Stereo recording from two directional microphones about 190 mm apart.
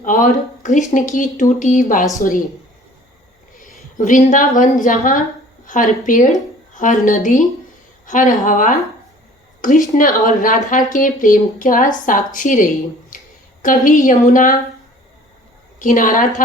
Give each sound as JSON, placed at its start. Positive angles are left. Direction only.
{"t": 0.0, "sound": "speech", "side_deg": 40}
{"t": 3.6, "sound": "a woman's voice", "side_deg": 45}
{"t": 15.8, "sound": "speech", "side_deg": 45}